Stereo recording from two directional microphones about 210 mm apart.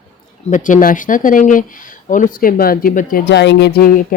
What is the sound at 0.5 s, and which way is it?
Speech, 40° left (ahead or behind).